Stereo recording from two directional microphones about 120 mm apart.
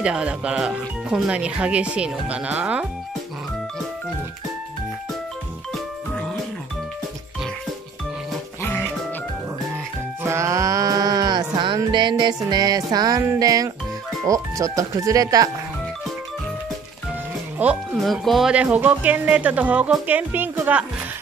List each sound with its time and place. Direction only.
0.0 s speech: 10° right (ahead or behind)
10.2 s music: 25° right (ahead or behind)
13.2 s speech: 25° right (ahead or behind)
17.6 s speech: 15° right (ahead or behind)
18.0 s speech: centre (ahead or behind)